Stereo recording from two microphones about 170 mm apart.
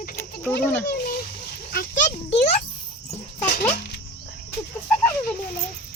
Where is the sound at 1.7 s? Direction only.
55° left (ahead or behind).